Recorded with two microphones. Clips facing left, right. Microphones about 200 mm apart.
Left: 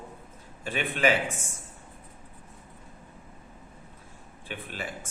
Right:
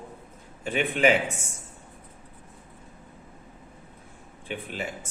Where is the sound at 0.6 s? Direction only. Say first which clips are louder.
Right 3 dB; 20° right (ahead or behind).